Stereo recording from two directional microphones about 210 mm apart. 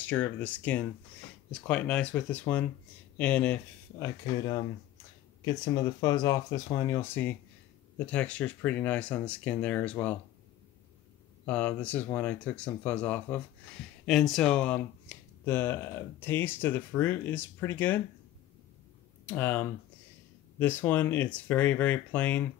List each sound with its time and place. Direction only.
0.0 s speech: 10° left (ahead or behind)
5.4 s speech: 20° left (ahead or behind)
11.4 s speech: 5° left (ahead or behind)
19.2 s speech: 10° left (ahead or behind)